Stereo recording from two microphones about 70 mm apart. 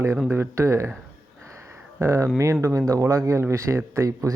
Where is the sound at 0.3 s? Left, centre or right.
Right.